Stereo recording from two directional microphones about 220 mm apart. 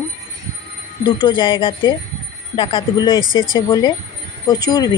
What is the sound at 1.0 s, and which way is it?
A woman's voice, 20° left (ahead or behind).